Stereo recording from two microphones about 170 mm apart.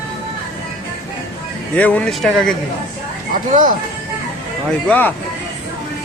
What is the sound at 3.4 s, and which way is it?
Speech, 50° right (ahead or behind).